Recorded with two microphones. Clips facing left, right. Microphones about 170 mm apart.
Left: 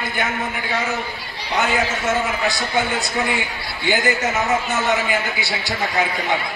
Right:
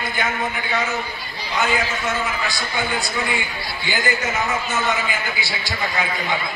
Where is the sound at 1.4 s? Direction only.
65° left (ahead or behind).